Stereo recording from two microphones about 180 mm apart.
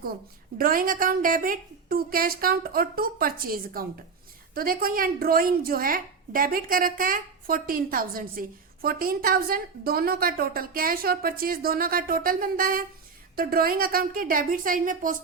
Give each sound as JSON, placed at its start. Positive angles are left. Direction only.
{"t": 0.6, "sound": "a woman's voice", "side_deg": -55}